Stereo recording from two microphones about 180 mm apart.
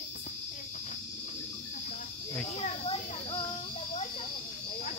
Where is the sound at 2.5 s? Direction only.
35° left (ahead or behind).